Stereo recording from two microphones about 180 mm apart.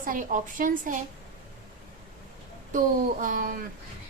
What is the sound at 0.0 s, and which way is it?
Speech, 50° right (ahead or behind).